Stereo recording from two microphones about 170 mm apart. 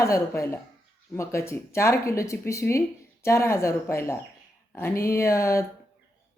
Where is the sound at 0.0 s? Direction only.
15° left (ahead or behind).